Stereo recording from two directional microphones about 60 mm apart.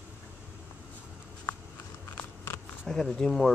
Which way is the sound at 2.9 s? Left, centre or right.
Centre.